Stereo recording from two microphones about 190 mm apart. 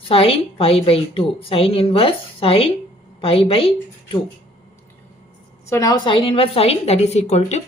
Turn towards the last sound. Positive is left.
turn(degrees=35)  # may be behind; listen again after turning